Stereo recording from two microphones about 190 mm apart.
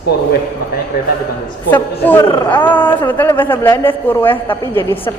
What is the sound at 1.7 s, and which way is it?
A man's voice, 10° left (ahead or behind).